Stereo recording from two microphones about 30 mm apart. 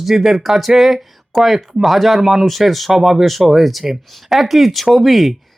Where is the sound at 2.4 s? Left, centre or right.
Centre.